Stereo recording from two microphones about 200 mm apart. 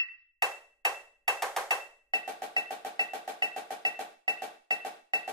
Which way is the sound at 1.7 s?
20° right (ahead or behind).